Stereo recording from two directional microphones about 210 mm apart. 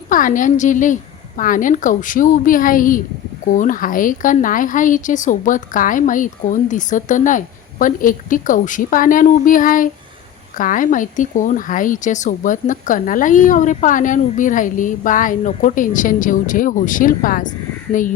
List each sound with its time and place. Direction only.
0.1 s speech: 40° left (ahead or behind)